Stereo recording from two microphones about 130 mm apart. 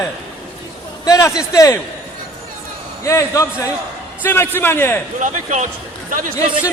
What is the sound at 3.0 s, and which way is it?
A man's voice, 25° left (ahead or behind).